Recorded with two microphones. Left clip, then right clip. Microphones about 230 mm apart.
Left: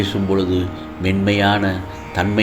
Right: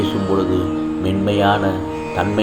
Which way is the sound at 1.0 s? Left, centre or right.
Left.